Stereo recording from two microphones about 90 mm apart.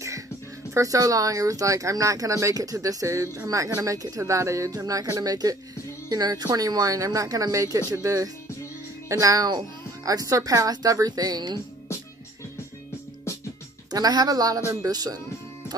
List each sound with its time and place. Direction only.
0.7 s speech: 40° right (ahead or behind)
13.9 s speech: 45° right (ahead or behind)